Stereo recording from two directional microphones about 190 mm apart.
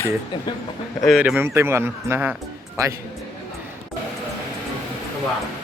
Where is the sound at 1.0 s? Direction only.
Centre (ahead or behind).